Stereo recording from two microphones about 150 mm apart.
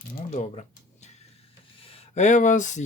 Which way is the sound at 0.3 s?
50° left (ahead or behind).